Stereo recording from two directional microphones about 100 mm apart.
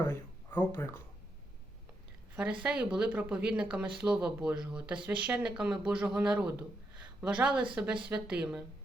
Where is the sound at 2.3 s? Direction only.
15° right (ahead or behind).